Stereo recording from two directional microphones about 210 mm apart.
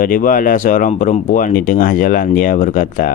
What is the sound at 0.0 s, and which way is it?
Speech, 40° left (ahead or behind).